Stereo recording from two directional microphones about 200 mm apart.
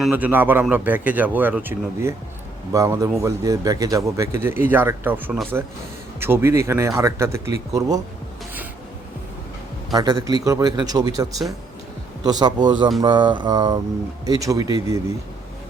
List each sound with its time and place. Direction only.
0.0 s a man's voice: 10° right (ahead or behind)
9.9 s a man's voice: 20° right (ahead or behind)